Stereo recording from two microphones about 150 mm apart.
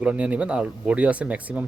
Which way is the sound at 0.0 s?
10° right (ahead or behind).